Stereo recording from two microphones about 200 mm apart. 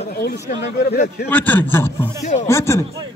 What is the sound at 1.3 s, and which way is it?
Speech, 10° left (ahead or behind).